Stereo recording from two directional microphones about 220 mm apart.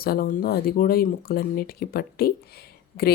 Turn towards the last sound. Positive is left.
turn(degrees=45)  # may be behind; listen again after turning